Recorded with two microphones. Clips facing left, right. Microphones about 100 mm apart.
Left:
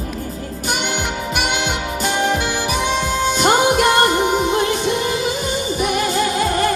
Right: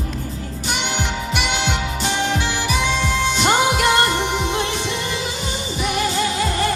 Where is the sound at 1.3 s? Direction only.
50° left (ahead or behind).